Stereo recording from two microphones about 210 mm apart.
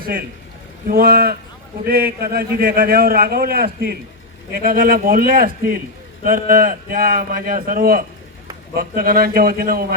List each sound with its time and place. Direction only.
0.0 s a man's voice: 45° right (ahead or behind)